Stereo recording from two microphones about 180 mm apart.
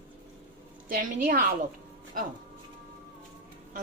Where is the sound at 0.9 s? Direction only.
45° right (ahead or behind).